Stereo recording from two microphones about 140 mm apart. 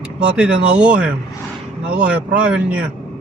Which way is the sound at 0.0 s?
10° right (ahead or behind).